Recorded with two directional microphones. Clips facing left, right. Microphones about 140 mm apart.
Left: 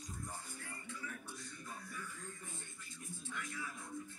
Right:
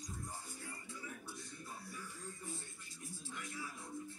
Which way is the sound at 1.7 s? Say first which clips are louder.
Left 3 dB; 30° right (ahead or behind).